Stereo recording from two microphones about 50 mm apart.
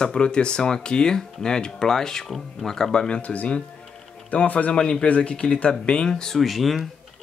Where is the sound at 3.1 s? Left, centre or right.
Left.